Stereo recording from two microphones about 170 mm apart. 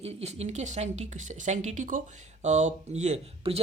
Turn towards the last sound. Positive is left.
turn(degrees=-35)  # may be behind; listen again after turning